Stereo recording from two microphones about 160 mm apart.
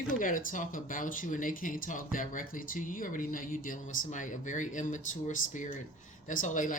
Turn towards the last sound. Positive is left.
turn(degrees=55)  # may be behind; listen again after turning